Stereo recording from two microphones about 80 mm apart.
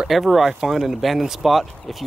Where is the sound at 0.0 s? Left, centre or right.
Centre.